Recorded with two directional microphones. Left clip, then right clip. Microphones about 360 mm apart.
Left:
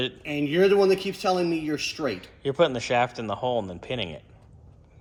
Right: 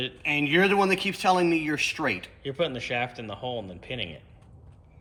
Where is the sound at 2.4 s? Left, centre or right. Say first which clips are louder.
Left 6 dB; centre.